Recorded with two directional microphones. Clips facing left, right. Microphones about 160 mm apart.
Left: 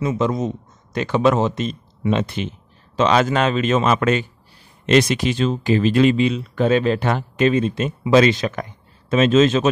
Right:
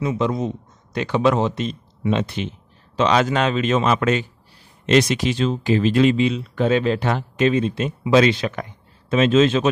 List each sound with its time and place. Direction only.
0.0 s speech: 45° left (ahead or behind)